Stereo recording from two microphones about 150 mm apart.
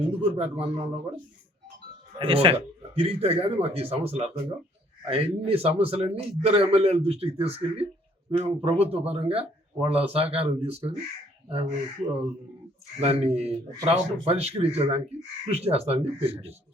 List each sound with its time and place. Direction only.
0.2 s speech: 40° right (ahead or behind)
13.1 s speech: 40° right (ahead or behind)